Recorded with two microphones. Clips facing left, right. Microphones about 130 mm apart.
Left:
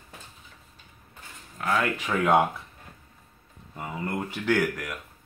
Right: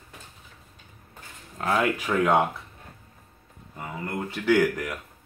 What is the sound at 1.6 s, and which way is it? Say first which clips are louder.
Speech: right 1 dB; 30° right (ahead or behind).